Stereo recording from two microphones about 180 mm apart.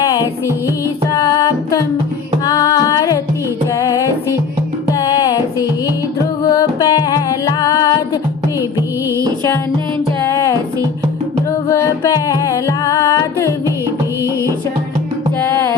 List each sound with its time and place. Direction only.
0.0 s music: 20° left (ahead or behind)
9.0 s music: 15° right (ahead or behind)
10.2 s music: 15° left (ahead or behind)
11.7 s music: 15° left (ahead or behind)